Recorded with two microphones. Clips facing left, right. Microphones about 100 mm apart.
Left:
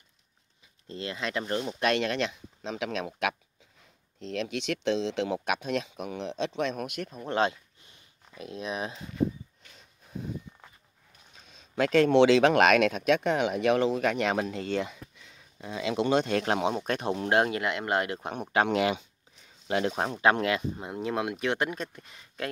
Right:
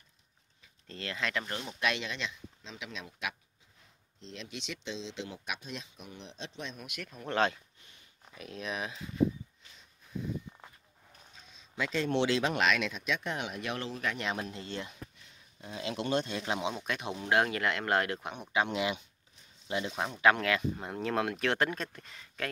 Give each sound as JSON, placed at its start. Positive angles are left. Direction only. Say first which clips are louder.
{"t": 0.8, "sound": "speech", "louder": "left 3 dB", "side_deg": 20}
{"t": 1.8, "sound": "speech", "louder": "left 7 dB", "side_deg": 50}
{"t": 6.9, "sound": "speech", "louder": "left 4 dB", "side_deg": 30}
{"t": 11.5, "sound": "speech", "louder": "left 10 dB", "side_deg": 60}
{"t": 16.6, "sound": "speech", "louder": "left 7 dB", "side_deg": 45}
{"t": 17.3, "sound": "speech", "louder": "left 2 dB", "side_deg": 25}
{"t": 18.3, "sound": "speech", "louder": "left 8 dB", "side_deg": 50}
{"t": 19.9, "sound": "speech", "louder": "left 5 dB", "side_deg": 45}
{"t": 20.2, "sound": "speech", "louder": "left 1 dB", "side_deg": 30}
{"t": 20.8, "sound": "speech", "louder": "left 1 dB", "side_deg": 15}